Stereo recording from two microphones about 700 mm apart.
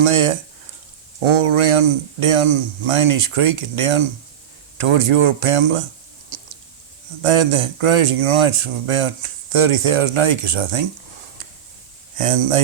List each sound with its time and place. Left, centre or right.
0.0 s speech: right
1.4 s speech: right
7.3 s speech: right
12.1 s speech: right